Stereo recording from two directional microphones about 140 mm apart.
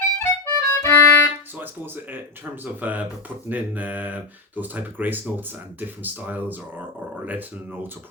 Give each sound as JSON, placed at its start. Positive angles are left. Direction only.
{"t": 0.2, "sound": "harmonica", "side_deg": 20}
{"t": 1.5, "sound": "speech", "side_deg": -15}